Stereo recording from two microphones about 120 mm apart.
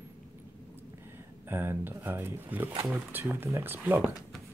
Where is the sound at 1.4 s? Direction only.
20° right (ahead or behind).